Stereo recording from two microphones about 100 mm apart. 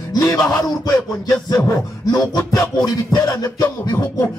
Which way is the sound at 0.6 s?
35° left (ahead or behind).